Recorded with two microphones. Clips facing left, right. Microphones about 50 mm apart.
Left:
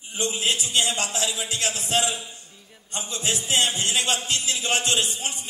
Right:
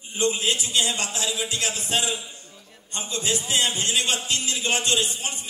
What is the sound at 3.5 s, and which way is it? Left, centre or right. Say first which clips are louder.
Speech: left 2 dB; left.